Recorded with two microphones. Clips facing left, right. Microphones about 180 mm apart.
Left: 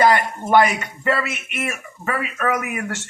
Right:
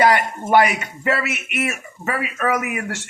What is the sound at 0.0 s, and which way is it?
Speech, 10° right (ahead or behind).